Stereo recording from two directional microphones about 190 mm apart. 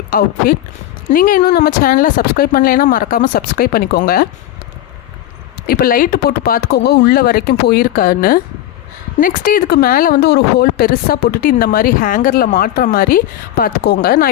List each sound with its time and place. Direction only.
0.1 s a woman's voice: 50° left (ahead or behind)
5.6 s a woman's voice: 50° left (ahead or behind)